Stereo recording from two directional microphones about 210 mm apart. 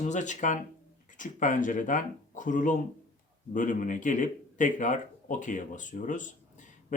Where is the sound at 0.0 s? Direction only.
35° left (ahead or behind).